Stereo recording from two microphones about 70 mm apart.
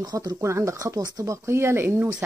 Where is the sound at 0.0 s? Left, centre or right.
Right.